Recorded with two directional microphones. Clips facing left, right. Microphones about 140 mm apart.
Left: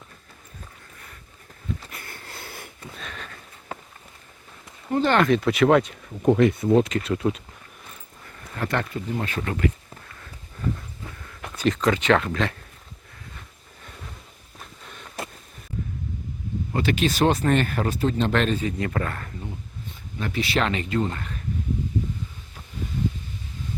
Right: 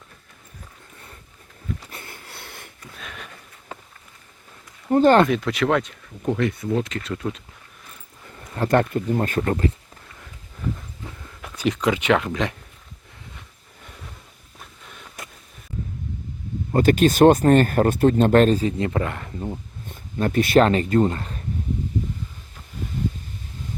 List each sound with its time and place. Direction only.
2.2 s sniff: centre (ahead or behind)
4.9 s speech: 45° right (ahead or behind)
5.3 s speech: 5° left (ahead or behind)
6.2 s speech: 20° left (ahead or behind)
6.9 s speech: 10° left (ahead or behind)
8.7 s speech: 45° right (ahead or behind)
11.5 s speech: 10° right (ahead or behind)
14.6 s a sound: 5° right (ahead or behind)
16.7 s speech: 45° right (ahead or behind)
18.8 s speech: 20° right (ahead or behind)
19.4 s speech: 45° right (ahead or behind)